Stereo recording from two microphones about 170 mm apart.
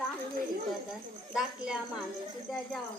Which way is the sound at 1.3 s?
5° right (ahead or behind).